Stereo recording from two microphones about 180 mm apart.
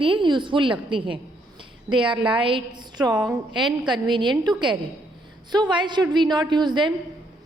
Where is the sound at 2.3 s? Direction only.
30° right (ahead or behind).